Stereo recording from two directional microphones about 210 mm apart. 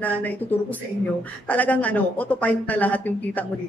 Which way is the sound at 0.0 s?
10° left (ahead or behind).